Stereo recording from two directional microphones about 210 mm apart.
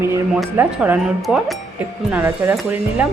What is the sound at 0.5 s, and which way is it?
Speech, 10° right (ahead or behind).